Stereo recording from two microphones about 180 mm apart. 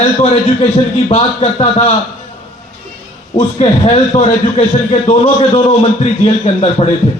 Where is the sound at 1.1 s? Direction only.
35° left (ahead or behind).